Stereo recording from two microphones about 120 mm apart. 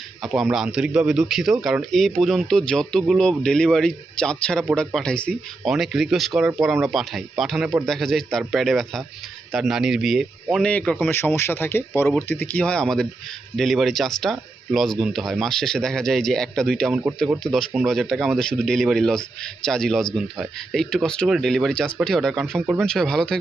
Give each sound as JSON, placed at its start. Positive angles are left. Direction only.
{"t": 0.5, "sound": "speech", "side_deg": -5}
{"t": 5.6, "sound": "speech", "side_deg": 0}
{"t": 10.6, "sound": "speech", "side_deg": 10}